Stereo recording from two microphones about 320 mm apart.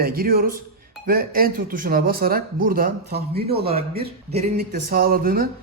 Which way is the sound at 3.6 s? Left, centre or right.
Centre.